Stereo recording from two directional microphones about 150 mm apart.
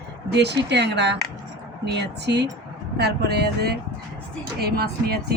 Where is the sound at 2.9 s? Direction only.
90° right.